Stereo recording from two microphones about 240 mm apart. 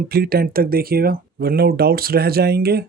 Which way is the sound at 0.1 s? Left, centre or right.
Right.